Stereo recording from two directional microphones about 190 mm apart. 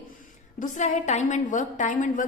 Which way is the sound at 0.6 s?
40° left (ahead or behind).